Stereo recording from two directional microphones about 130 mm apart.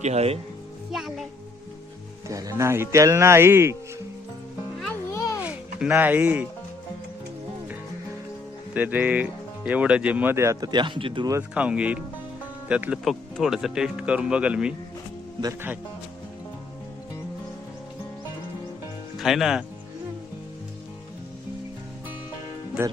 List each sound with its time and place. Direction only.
0.0 s speech: 55° right (ahead or behind)
0.9 s a child's voice: 5° right (ahead or behind)
2.2 s speech: 25° right (ahead or behind)
5.1 s children playing: 25° left (ahead or behind)
5.4 s speech: 10° right (ahead or behind)
8.7 s speech: 10° right (ahead or behind); by 11.3 s 40° right (ahead or behind)
11.5 s speech: 10° right (ahead or behind)
19.1 s speech: centre (ahead or behind)
22.8 s speech: 15° right (ahead or behind)